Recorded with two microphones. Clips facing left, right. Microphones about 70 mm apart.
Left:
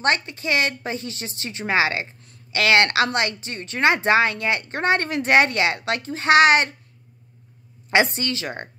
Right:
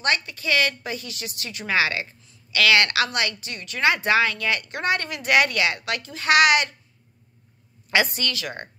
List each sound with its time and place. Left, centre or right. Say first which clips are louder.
0.0 s a woman's voice: left 3 dB; left
7.9 s speech: left 3 dB; left